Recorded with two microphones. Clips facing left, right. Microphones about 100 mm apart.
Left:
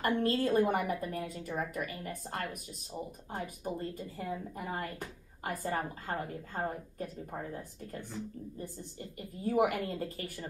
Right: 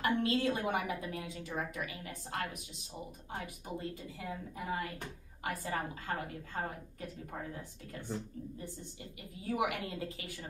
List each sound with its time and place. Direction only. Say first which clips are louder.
0.0 s a woman's voice: left 1 dB; 45° left (ahead or behind)
9.5 s a woman's voice: left 5 dB; 45° left (ahead or behind)